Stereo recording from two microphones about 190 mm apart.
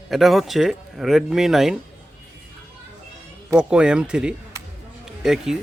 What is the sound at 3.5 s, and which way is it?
Speech, 5° right (ahead or behind).